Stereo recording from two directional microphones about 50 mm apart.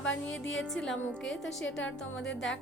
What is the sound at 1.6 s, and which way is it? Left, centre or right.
Speech, left.